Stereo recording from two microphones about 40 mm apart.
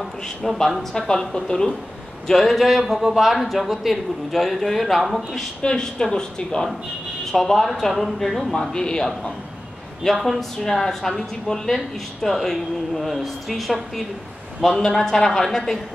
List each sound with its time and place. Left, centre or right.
0.0 s speech: centre
0.9 s speech: centre
2.9 s speech: centre
5.6 s speech: centre
7.3 s speech: centre
14.8 s speech: centre